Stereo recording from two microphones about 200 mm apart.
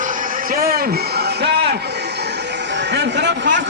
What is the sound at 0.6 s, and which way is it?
Speech, 50° right (ahead or behind).